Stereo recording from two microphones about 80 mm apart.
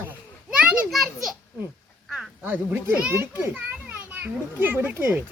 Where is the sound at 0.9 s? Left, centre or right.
Centre.